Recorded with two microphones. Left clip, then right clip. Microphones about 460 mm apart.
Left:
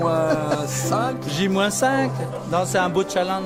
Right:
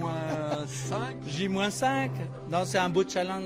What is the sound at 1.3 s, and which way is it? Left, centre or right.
Speech, centre.